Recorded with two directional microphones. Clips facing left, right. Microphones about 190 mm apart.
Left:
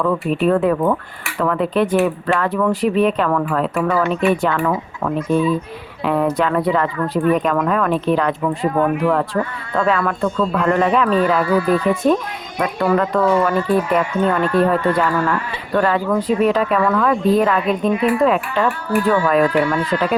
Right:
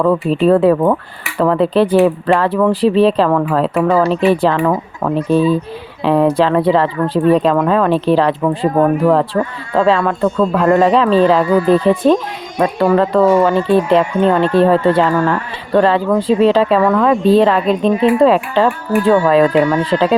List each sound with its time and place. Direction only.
0.0 s speech: 35° right (ahead or behind)
18.9 s speech: 45° right (ahead or behind)
19.3 s speech: 25° right (ahead or behind)